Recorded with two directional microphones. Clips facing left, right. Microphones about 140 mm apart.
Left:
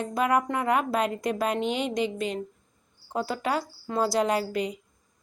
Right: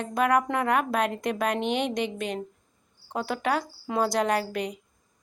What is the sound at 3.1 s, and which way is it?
Speech, centre (ahead or behind).